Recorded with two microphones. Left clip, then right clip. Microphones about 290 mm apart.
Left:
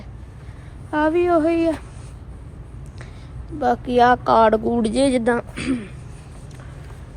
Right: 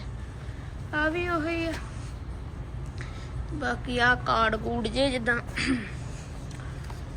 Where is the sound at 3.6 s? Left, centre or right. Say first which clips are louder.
Left 10 dB; centre.